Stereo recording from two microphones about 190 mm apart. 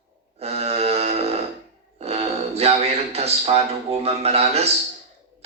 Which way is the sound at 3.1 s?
35° right (ahead or behind).